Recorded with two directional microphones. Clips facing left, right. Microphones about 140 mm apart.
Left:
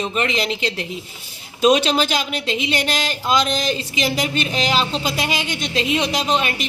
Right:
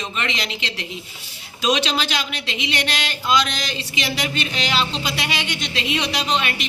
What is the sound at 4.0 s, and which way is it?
A woman's voice, 45° left (ahead or behind).